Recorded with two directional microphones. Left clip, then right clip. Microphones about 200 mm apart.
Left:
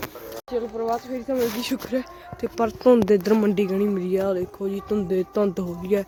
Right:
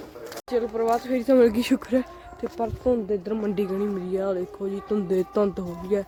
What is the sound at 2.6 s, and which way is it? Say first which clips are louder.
Speech: left 7 dB; 40° left (ahead or behind).